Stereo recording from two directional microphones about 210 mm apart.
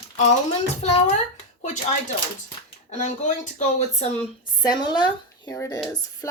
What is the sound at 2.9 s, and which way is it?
Speech, 35° left (ahead or behind).